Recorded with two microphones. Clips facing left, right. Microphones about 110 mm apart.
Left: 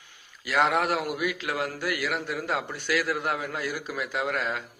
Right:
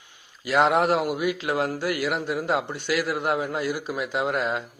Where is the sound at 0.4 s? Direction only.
25° right (ahead or behind).